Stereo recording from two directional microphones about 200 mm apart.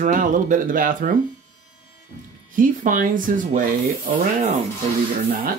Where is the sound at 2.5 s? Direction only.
40° right (ahead or behind).